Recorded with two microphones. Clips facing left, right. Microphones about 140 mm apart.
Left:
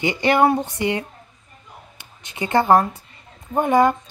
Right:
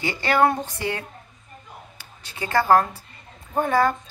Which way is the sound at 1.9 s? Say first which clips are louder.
Left 1 dB; 20° left (ahead or behind).